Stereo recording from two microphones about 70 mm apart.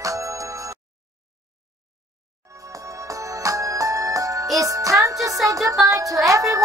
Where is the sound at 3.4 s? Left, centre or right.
Right.